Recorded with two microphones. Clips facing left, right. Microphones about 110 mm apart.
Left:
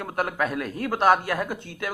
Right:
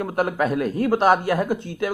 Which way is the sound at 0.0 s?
10° right (ahead or behind).